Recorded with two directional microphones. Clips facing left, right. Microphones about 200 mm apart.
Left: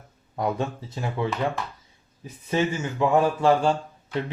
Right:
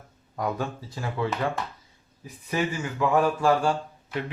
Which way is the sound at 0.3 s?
25° left (ahead or behind).